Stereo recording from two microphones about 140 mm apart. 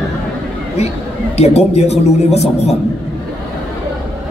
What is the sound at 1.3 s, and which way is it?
A man's voice, 50° left (ahead or behind).